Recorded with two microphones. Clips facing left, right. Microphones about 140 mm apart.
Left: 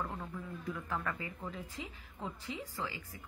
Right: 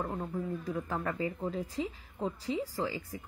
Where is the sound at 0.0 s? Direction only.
35° right (ahead or behind).